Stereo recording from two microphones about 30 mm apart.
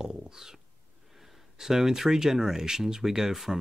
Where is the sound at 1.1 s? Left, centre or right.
Centre.